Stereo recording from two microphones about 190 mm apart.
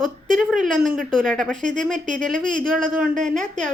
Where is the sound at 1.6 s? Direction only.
40° right (ahead or behind).